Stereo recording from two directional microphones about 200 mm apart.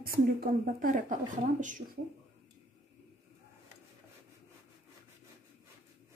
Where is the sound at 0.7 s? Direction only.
40° right (ahead or behind).